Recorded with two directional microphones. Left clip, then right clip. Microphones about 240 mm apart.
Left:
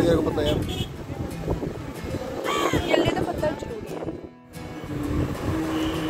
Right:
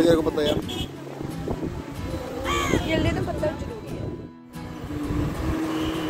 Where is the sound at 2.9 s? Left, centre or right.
Centre.